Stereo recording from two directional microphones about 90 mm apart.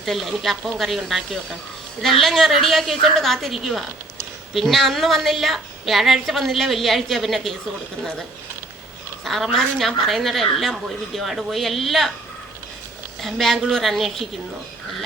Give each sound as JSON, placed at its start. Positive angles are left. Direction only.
{"t": 0.0, "sound": "a woman's voice", "side_deg": 0}
{"t": 9.2, "sound": "a woman's voice", "side_deg": 0}
{"t": 13.2, "sound": "a woman's voice", "side_deg": 0}